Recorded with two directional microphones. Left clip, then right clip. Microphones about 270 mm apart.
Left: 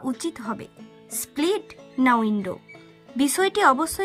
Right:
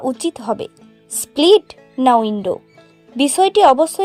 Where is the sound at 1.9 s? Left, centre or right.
Right.